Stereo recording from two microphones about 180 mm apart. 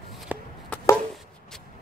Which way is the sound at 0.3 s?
10° right (ahead or behind).